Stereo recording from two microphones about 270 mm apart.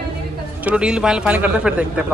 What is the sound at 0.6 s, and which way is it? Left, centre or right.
Speech, centre.